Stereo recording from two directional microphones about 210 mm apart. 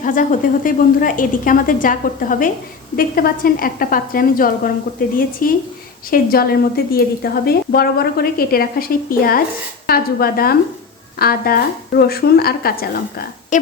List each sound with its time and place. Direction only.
0.0 s a woman's voice: 40° left (ahead or behind)